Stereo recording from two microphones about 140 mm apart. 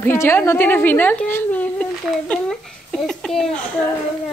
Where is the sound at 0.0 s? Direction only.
15° left (ahead or behind).